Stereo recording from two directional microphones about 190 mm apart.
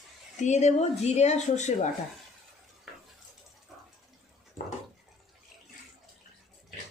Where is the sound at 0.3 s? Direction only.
40° left (ahead or behind).